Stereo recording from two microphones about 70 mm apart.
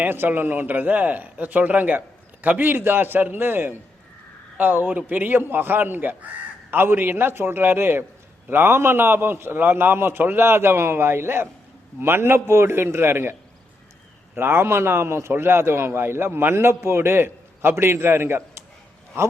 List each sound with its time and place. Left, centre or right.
0.0 s a man's voice: right
14.3 s a man's voice: right